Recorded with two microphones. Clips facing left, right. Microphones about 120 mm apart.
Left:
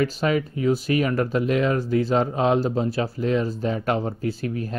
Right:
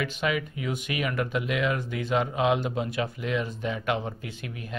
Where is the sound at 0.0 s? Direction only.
35° left (ahead or behind).